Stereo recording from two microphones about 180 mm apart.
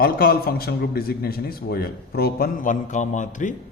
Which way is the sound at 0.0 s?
55° left (ahead or behind).